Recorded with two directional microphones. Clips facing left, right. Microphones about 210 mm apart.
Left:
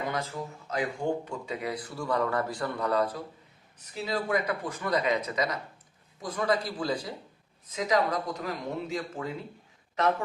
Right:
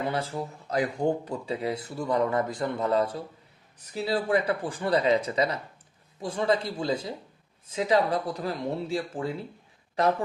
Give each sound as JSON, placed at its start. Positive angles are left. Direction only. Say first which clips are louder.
{"t": 0.1, "sound": "speech", "louder": "right 3 dB", "side_deg": -30}